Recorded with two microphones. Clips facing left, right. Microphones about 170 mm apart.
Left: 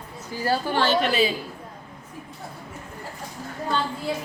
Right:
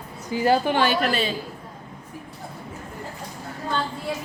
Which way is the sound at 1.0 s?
Centre (ahead or behind).